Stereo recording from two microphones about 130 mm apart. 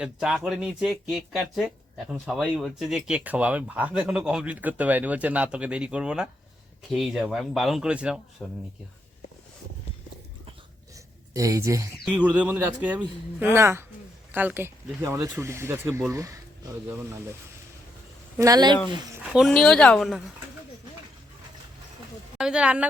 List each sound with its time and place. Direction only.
0.0 s speech: 5° right (ahead or behind)
11.3 s speech: 25° right (ahead or behind)
12.0 s speech: 10° right (ahead or behind)
16.9 s speech: 15° right (ahead or behind)
18.3 s speech: 30° right (ahead or behind)
19.3 s speech: centre (ahead or behind)
22.4 s speech: 5° right (ahead or behind)